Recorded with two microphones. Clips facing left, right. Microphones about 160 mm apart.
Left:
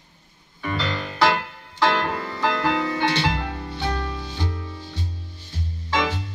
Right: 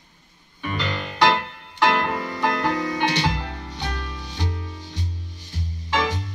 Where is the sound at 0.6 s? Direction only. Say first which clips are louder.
Left 1 dB; 15° right (ahead or behind).